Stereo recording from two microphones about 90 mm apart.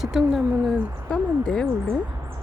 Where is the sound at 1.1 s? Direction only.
15° left (ahead or behind).